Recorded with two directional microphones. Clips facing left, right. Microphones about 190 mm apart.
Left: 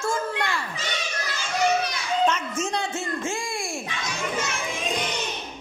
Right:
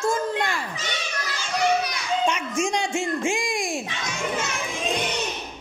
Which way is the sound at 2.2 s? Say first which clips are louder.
Left 1 dB; 10° right (ahead or behind).